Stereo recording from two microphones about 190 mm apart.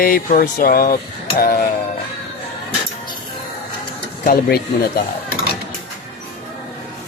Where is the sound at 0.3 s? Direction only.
45° left (ahead or behind).